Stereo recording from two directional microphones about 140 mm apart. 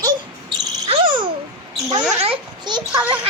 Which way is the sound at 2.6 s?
30° right (ahead or behind).